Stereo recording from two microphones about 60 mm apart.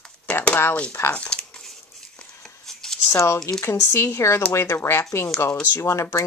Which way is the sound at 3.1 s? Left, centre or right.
Left.